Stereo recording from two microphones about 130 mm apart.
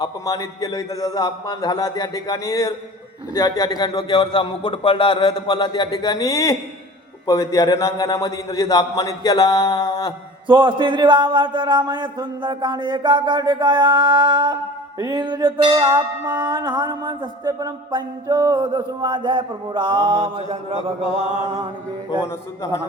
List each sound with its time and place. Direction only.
0.3 s a man's voice: 30° left (ahead or behind)
3.3 s a sound: 30° left (ahead or behind)
7.3 s a man's voice: 25° left (ahead or behind)
10.4 s music: 40° right (ahead or behind)